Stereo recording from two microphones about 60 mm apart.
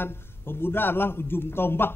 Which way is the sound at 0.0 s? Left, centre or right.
Left.